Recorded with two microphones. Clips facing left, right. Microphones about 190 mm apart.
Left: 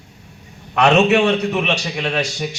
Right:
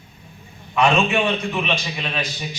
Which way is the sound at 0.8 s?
75° left (ahead or behind).